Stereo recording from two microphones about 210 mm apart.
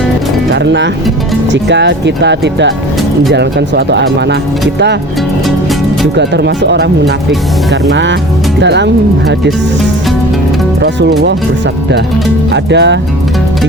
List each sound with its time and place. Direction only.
0.5 s speech: 55° right (ahead or behind)
6.1 s speech: 55° right (ahead or behind)
10.8 s speech: 55° right (ahead or behind)
12.5 s speech: 55° right (ahead or behind)